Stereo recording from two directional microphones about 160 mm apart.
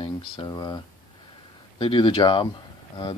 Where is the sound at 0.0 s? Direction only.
30° left (ahead or behind).